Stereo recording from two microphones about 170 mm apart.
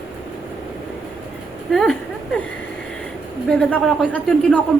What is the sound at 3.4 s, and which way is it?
Speech, 5° left (ahead or behind).